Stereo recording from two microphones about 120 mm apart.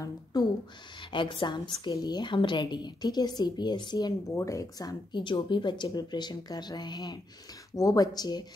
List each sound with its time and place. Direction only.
0.0 s speech: 30° left (ahead or behind)
1.1 s a woman's voice: 45° left (ahead or behind)
4.4 s a woman's voice: 25° left (ahead or behind)